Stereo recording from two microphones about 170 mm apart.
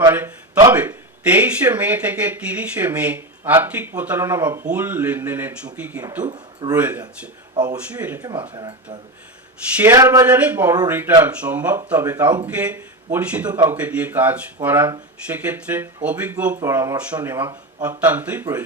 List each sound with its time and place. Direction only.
0.1 s a sound: 10° right (ahead or behind)
0.7 s speech: 10° right (ahead or behind)
6.2 s speech: 25° right (ahead or behind)
6.7 s speech: 10° right (ahead or behind)
7.5 s speech: 25° right (ahead or behind)
7.8 s speech: 10° right (ahead or behind)
8.2 s speech: 25° right (ahead or behind)
9.7 s speech: 15° right (ahead or behind)